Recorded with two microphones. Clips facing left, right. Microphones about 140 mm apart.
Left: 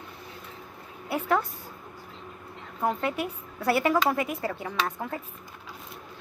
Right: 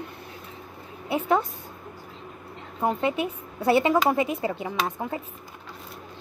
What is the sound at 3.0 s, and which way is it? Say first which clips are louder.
A woman's voice: right 4 dB; 20° right (ahead or behind).